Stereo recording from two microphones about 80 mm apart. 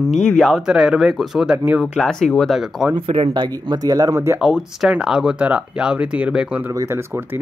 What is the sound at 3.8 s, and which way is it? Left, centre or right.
Speech, right.